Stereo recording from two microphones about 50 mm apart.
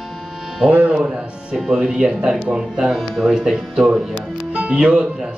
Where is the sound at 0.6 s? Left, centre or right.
Right.